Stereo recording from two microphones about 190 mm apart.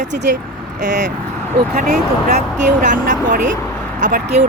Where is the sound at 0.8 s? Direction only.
40° right (ahead or behind).